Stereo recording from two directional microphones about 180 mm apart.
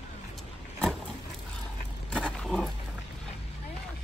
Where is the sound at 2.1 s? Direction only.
5° left (ahead or behind).